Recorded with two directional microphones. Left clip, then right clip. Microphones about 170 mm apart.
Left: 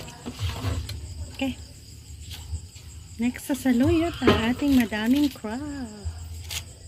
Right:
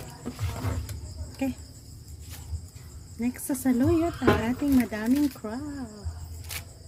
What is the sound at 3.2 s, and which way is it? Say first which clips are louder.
Speech: left 3 dB; centre (ahead or behind).